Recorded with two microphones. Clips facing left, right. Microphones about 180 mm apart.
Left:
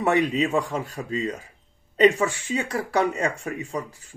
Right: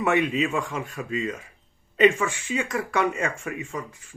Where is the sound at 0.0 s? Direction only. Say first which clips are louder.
Left 1 dB; 35° left (ahead or behind).